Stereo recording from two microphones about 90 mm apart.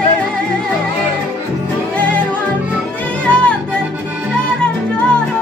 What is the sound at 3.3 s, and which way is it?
Music, 15° left (ahead or behind).